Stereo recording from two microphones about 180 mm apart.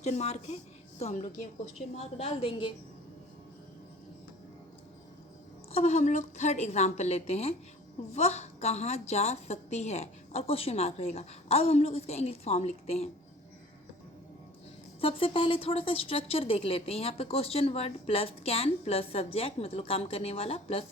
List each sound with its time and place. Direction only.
0.0 s a woman's voice: 40° left (ahead or behind)
5.7 s a woman's voice: 40° left (ahead or behind)
15.0 s a woman's voice: 30° left (ahead or behind)